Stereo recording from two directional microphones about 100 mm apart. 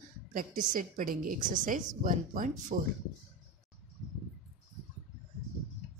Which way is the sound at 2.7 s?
90° right.